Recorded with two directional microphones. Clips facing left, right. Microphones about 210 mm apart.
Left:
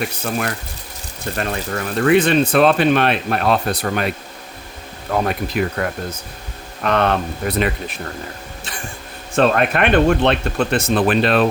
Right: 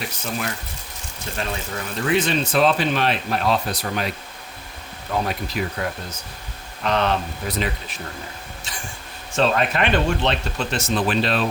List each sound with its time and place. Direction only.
0.3 s speech: 55° left (ahead or behind)
5.1 s speech: 55° left (ahead or behind)
9.3 s speech: 55° left (ahead or behind)